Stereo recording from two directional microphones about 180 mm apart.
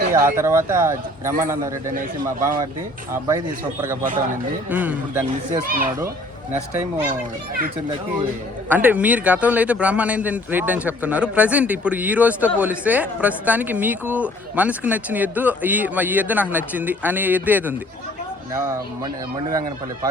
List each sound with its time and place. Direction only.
0.3 s a man's voice: 15° right (ahead or behind)
3.1 s a man's voice: 15° right (ahead or behind)
5.5 s speech: 50° right (ahead or behind)
6.5 s a man's voice: 10° right (ahead or behind)
8.7 s a man's voice: 10° right (ahead or behind)